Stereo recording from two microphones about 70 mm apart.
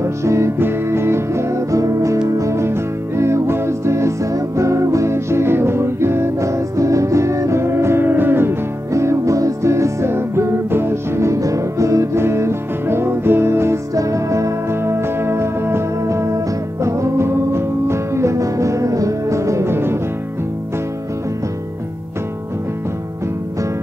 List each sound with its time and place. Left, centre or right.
0.0 s music: right
8.9 s music: right
13.9 s music: right